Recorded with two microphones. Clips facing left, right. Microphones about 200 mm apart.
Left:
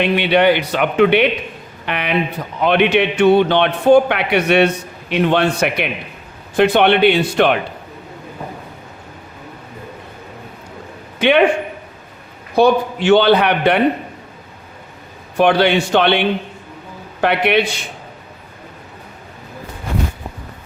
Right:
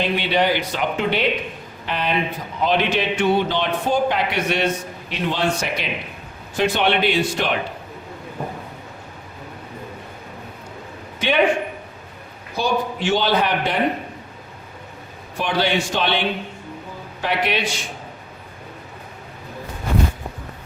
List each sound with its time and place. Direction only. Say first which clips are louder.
0.0 s a man's voice: left 6 dB; 65° left (ahead or behind)
12.5 s a man's voice: left 9 dB; 60° left (ahead or behind)
15.4 s a man's voice: left 8 dB; 65° left (ahead or behind)